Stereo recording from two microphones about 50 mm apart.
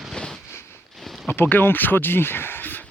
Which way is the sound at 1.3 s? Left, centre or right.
Left.